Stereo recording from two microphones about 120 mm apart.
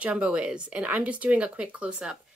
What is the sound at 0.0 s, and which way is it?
Speech, 10° right (ahead or behind).